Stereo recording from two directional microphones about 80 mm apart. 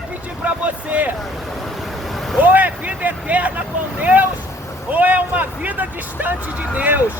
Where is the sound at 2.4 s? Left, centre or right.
Right.